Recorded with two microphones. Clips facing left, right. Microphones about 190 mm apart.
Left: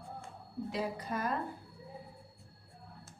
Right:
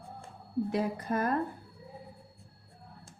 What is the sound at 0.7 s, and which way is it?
Speech, 55° right (ahead or behind).